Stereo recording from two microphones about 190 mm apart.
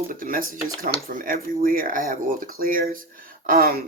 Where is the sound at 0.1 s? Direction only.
45° right (ahead or behind).